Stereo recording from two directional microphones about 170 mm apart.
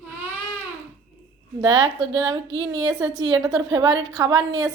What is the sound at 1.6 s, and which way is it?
A woman's voice, 25° right (ahead or behind).